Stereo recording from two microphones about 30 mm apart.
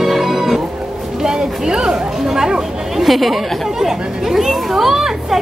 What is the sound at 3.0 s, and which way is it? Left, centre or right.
Chatter, centre.